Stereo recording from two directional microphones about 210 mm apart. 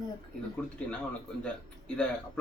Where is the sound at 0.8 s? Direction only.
5° left (ahead or behind).